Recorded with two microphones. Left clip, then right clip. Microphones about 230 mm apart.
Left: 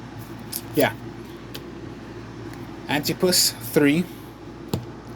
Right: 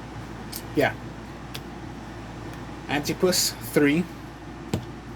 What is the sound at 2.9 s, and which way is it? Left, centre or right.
Speech, left.